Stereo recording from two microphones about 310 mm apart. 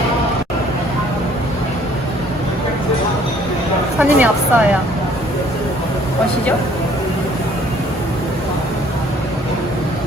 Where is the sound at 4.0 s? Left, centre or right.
Centre.